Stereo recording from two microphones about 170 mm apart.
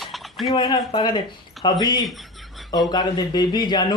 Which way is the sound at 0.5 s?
25° left (ahead or behind).